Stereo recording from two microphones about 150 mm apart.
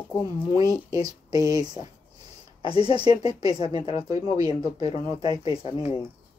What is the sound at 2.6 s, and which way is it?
Speech, 40° left (ahead or behind).